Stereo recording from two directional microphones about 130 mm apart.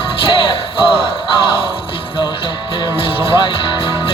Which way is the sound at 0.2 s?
40° left (ahead or behind).